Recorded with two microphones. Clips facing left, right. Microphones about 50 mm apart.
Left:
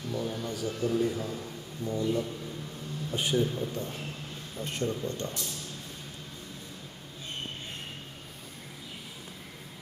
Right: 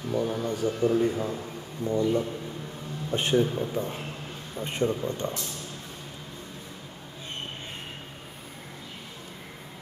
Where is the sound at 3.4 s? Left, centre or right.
Right.